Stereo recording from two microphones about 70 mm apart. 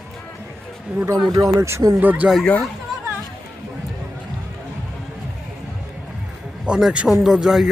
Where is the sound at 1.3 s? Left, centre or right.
Right.